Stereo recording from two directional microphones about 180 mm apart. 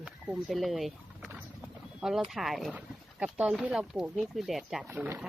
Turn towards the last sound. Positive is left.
turn(degrees=-5)  # may be behind; listen again after turning